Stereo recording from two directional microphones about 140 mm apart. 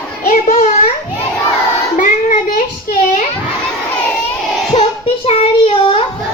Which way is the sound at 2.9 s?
70° left (ahead or behind).